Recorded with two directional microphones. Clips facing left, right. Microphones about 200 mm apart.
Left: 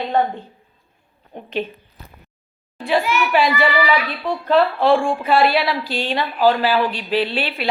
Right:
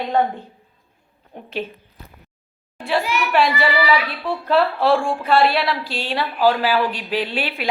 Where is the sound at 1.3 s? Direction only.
5° right (ahead or behind).